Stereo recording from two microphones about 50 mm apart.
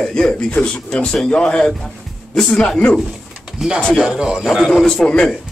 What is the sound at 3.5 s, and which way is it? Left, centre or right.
Speech, centre.